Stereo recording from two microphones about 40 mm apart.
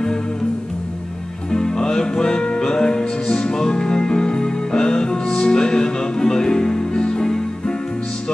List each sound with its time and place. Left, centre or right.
1.5 s music: centre